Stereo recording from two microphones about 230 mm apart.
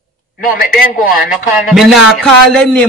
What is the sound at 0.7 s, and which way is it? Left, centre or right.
A man's voice, centre.